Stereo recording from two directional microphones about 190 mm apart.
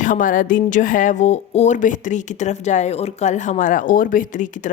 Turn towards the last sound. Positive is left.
turn(degrees=45)  # may be behind; listen again after turning